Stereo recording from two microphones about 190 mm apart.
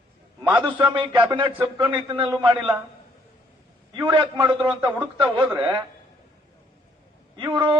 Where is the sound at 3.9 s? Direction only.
25° right (ahead or behind).